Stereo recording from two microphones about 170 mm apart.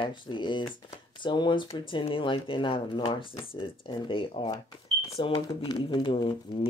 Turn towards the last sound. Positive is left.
turn(degrees=30)  # may be behind; listen again after turning